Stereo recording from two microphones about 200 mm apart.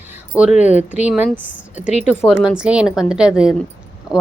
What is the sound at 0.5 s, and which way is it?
Speech, 35° left (ahead or behind).